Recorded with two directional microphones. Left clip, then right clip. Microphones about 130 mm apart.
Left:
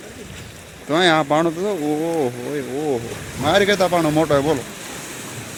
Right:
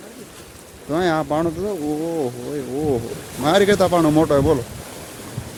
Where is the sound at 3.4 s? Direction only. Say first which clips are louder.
Right 1 dB; 40° right (ahead or behind).